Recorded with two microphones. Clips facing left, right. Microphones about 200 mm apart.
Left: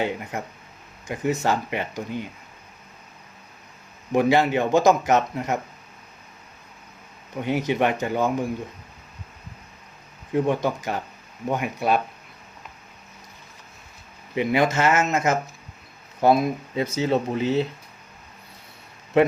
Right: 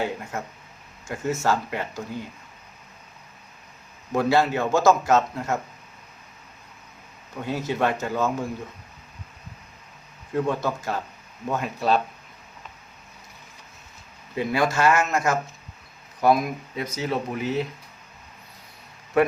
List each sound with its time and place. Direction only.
0.0 s a man's voice: 20° left (ahead or behind)
4.1 s a man's voice: 15° left (ahead or behind)
7.4 s a man's voice: 15° left (ahead or behind)
10.3 s a man's voice: 15° left (ahead or behind)
14.3 s speech: 20° left (ahead or behind)
19.1 s speech: 20° left (ahead or behind)